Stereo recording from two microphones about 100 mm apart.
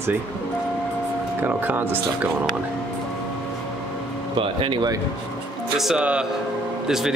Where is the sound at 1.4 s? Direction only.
15° right (ahead or behind).